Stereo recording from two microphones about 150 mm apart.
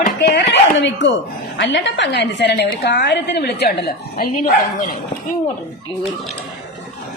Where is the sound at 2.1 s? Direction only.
90° left; by 4.9 s 65° left (ahead or behind).